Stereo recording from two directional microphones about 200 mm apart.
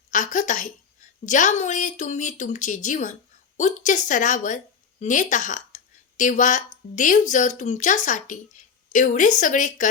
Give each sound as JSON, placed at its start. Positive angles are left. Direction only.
{"t": 0.1, "sound": "a woman's voice", "side_deg": 40}